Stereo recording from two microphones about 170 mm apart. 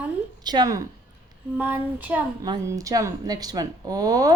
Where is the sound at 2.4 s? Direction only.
20° right (ahead or behind).